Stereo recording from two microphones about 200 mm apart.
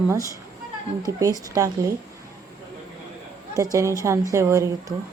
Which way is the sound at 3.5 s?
15° right (ahead or behind).